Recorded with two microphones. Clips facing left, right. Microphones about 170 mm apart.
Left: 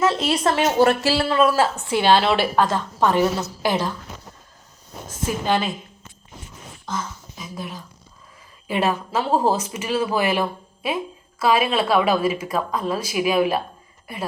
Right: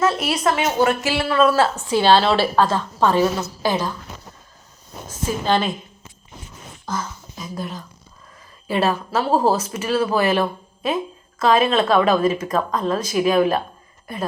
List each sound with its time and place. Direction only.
0.0 s speech: 20° left (ahead or behind)
1.4 s speech: 10° left (ahead or behind)
5.5 s speech: 5° left (ahead or behind)
6.8 s a sound: centre (ahead or behind)
8.6 s speech: 15° left (ahead or behind)